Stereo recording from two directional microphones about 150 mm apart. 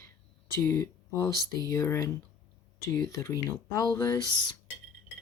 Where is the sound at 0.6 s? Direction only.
20° left (ahead or behind).